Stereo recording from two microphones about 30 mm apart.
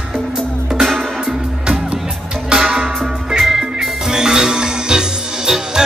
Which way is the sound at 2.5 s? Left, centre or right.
Right.